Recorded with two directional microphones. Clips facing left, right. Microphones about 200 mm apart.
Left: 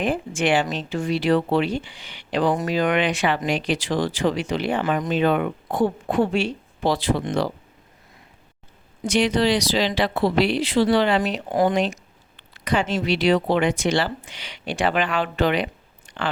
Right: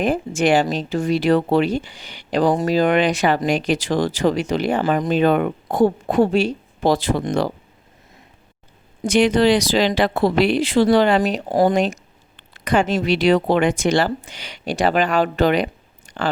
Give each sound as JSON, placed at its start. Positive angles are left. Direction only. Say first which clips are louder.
{"t": 0.0, "sound": "speech", "louder": "right 4 dB", "side_deg": -40}
{"t": 9.0, "sound": "speech", "louder": "right 5 dB", "side_deg": -50}